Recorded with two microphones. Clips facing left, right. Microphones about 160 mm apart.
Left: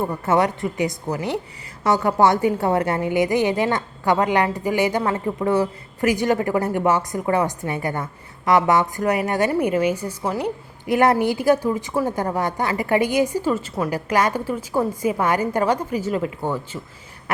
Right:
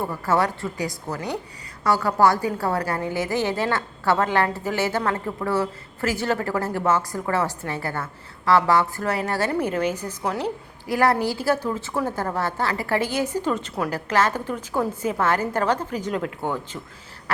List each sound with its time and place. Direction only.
0.0 s a woman's voice: 20° left (ahead or behind)
10.8 s a woman's voice: 20° left (ahead or behind)